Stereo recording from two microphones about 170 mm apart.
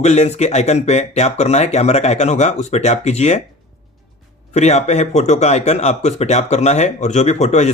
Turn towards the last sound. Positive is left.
turn(degrees=45)  # may be behind; listen again after turning